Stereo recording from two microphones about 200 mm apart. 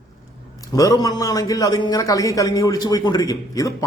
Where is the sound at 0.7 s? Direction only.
15° left (ahead or behind).